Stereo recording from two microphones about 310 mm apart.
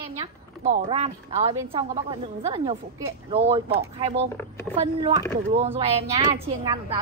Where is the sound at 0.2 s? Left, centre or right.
Right.